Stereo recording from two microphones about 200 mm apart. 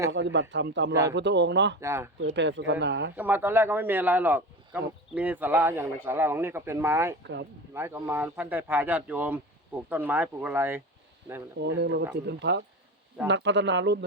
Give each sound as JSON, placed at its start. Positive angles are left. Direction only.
{"t": 0.1, "sound": "speech", "side_deg": -65}
{"t": 1.8, "sound": "speech", "side_deg": -15}
{"t": 2.2, "sound": "speech", "side_deg": -65}
{"t": 3.2, "sound": "speech", "side_deg": -10}
{"t": 11.6, "sound": "speech", "side_deg": -60}